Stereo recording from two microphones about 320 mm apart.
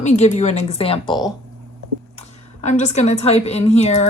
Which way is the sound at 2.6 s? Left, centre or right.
Left.